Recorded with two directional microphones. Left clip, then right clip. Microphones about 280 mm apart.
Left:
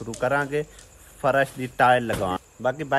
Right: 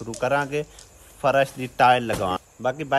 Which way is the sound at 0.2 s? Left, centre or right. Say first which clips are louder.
Even; centre.